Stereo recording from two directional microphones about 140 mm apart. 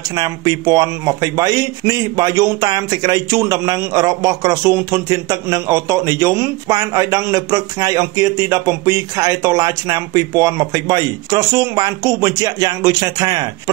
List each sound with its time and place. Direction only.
0.1 s speech: 30° right (ahead or behind)